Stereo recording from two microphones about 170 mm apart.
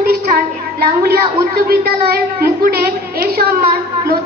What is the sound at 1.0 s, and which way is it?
A woman's voice, 65° right (ahead or behind).